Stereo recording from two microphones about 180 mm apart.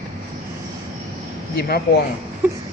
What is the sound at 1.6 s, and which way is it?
Speech, 60° left (ahead or behind).